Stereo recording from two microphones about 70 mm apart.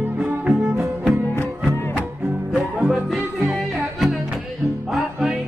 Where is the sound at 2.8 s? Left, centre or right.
Centre.